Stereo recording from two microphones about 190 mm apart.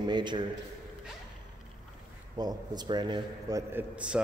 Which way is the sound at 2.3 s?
20° right (ahead or behind).